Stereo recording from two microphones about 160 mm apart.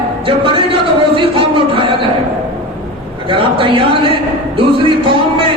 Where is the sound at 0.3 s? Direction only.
30° right (ahead or behind).